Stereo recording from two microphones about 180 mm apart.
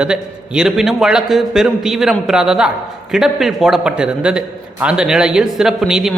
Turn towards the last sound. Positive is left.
turn(degrees=0)  # may be behind; listen again after turning